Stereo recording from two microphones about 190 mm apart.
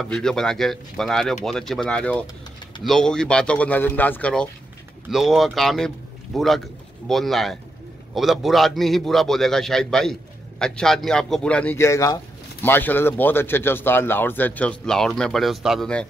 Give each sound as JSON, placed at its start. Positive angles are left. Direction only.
{"t": 0.0, "sound": "a man's voice", "side_deg": 5}